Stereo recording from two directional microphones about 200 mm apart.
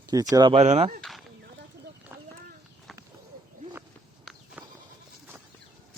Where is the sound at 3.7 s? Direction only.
10° right (ahead or behind).